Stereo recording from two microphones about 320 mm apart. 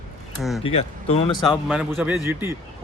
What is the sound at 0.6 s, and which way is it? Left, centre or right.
Speech, centre.